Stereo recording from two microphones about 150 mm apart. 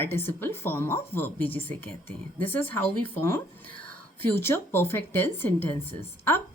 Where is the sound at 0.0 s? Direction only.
15° left (ahead or behind).